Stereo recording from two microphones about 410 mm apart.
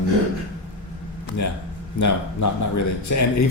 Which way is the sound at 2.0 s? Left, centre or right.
Left.